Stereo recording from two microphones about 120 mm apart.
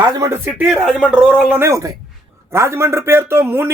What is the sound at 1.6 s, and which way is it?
A man's voice, 25° right (ahead or behind).